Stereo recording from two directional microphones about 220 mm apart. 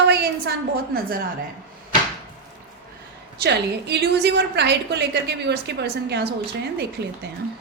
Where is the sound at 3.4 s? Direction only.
50° right (ahead or behind).